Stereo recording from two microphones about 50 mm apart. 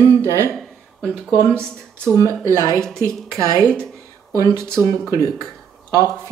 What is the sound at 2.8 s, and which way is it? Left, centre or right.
Speech, centre.